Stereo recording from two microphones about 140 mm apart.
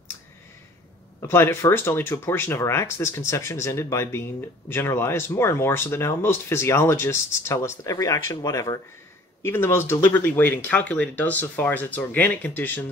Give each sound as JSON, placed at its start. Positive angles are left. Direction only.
{"t": 1.2, "sound": "speech", "side_deg": 15}